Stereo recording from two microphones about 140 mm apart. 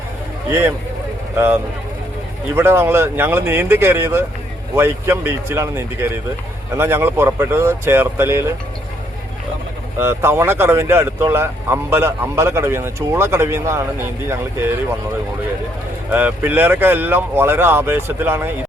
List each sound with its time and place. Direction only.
2.6 s speech: 15° right (ahead or behind)
10.0 s speech: 15° right (ahead or behind)
16.1 s speech: 15° right (ahead or behind)